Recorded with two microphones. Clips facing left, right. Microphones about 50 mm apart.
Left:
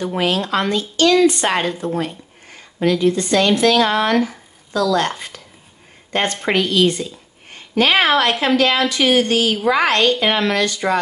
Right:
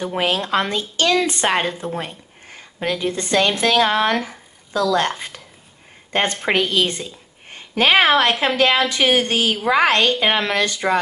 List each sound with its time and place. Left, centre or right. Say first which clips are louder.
0.0 s a woman's voice: left 2 dB; right